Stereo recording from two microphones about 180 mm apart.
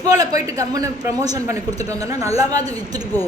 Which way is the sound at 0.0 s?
20° right (ahead or behind).